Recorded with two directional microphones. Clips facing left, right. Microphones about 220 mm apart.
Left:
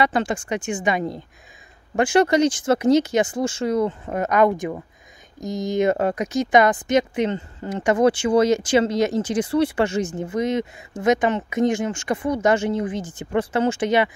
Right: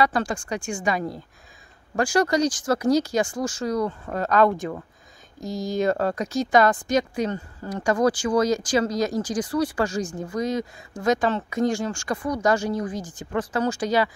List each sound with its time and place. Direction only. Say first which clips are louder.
0.0 s speech: left 2 dB; 20° left (ahead or behind)